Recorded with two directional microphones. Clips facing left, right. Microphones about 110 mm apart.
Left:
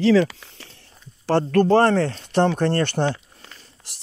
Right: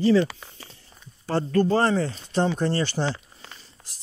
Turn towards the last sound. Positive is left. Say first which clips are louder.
# left 3 dB
turn(degrees=75)  # may be behind; listen again after turning